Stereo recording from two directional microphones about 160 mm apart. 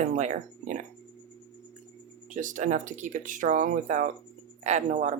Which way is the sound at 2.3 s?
55° right (ahead or behind).